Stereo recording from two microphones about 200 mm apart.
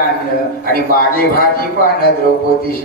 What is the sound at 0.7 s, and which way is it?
Speech, 45° left (ahead or behind).